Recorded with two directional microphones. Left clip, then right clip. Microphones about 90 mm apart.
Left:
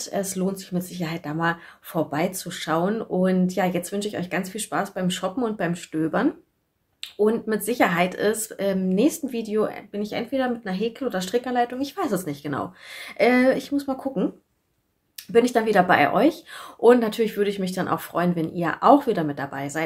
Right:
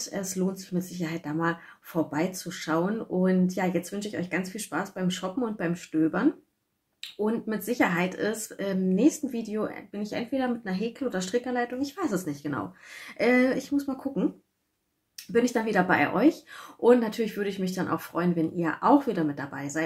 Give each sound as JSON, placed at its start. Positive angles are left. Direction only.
{"t": 0.0, "sound": "speech", "side_deg": 40}
{"t": 7.0, "sound": "speech", "side_deg": 35}
{"t": 15.3, "sound": "speech", "side_deg": 40}